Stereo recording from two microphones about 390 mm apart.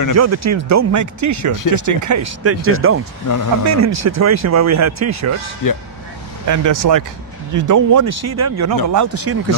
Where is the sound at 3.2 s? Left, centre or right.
Left.